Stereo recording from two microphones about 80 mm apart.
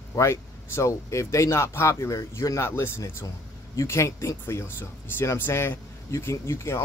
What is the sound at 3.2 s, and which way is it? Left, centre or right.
Speech, left.